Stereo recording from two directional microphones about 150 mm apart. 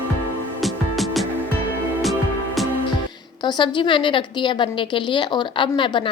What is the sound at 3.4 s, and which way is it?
A woman's voice, 30° left (ahead or behind).